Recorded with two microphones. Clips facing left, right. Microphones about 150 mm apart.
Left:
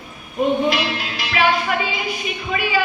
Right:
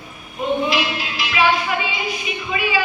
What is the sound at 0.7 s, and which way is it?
Music, 50° left (ahead or behind).